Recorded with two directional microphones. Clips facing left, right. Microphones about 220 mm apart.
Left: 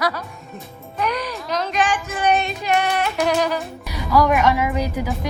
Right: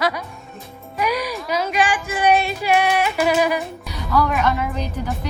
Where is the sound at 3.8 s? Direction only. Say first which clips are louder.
Left 5 dB; 10° left (ahead or behind).